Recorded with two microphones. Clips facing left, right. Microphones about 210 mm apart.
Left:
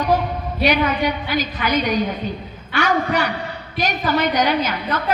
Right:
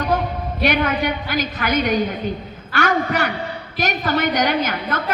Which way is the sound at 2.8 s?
50° right (ahead or behind).